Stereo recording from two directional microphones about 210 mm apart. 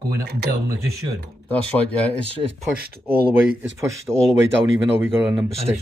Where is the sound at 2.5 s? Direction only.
45° right (ahead or behind).